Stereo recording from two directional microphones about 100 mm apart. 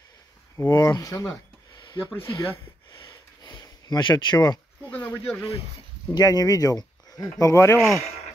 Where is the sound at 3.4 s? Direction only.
35° left (ahead or behind).